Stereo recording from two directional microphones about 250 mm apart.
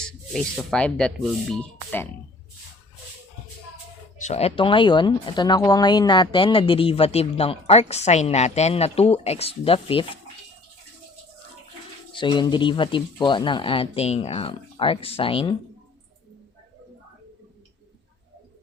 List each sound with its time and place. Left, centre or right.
0.0 s speech: centre
4.2 s speech: left
12.1 s speech: centre